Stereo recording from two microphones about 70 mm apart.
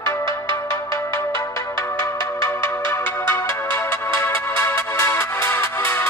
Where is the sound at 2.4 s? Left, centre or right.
Left.